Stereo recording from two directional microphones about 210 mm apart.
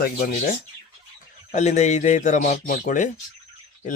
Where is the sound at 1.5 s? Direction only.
35° left (ahead or behind).